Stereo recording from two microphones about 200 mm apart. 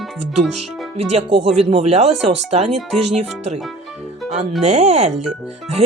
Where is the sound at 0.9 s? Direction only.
30° right (ahead or behind).